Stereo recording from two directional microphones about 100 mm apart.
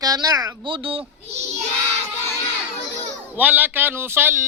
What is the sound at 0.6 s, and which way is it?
Speech, 55° right (ahead or behind).